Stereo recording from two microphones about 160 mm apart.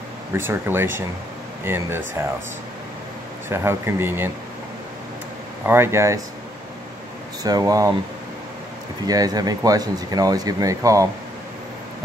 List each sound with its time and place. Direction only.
0.3 s speech: 15° right (ahead or behind)
3.4 s speech: 15° right (ahead or behind)
5.7 s speech: 15° right (ahead or behind)
7.4 s speech: 20° right (ahead or behind)
9.0 s speech: 25° right (ahead or behind)